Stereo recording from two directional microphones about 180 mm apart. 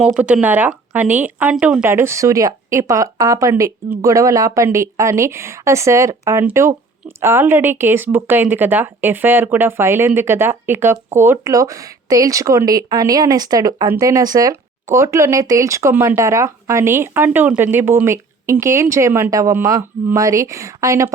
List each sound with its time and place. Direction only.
0.0 s speech: 5° right (ahead or behind)